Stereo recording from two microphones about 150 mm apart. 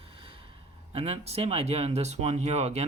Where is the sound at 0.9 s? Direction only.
40° right (ahead or behind).